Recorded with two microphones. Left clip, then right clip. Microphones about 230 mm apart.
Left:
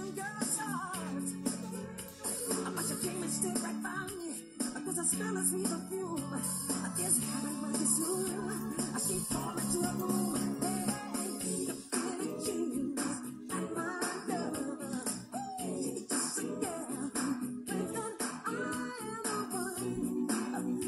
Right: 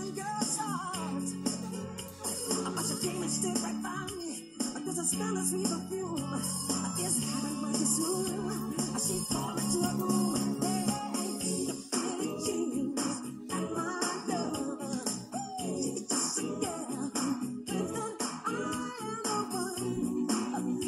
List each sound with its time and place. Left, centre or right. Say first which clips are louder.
8.0 s music: right 3 dB; right
9.3 s music: right 3 dB; right
9.9 s music: right 3 dB; right
13.7 s music: right 3 dB; right
17.7 s music: right 3 dB; right
19.8 s music: right 2 dB; right